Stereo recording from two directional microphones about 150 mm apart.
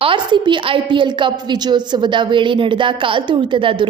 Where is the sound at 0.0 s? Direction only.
35° right (ahead or behind).